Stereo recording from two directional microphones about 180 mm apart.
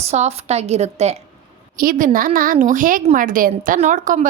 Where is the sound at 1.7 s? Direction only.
50° right (ahead or behind).